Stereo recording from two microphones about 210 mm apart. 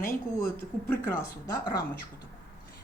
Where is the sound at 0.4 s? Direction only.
10° left (ahead or behind).